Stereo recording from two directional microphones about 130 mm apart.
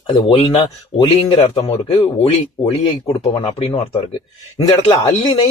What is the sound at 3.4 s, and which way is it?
Speech, 45° left (ahead or behind).